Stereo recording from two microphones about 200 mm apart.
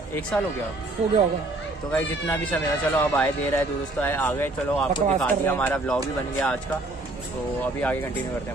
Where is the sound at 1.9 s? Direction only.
5° left (ahead or behind).